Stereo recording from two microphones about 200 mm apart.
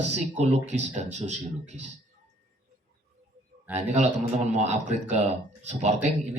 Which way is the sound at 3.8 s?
35° right (ahead or behind).